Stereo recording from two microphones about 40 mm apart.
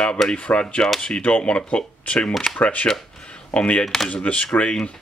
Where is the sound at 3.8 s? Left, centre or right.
Centre.